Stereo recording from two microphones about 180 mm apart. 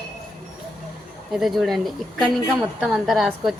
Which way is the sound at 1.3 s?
Centre (ahead or behind).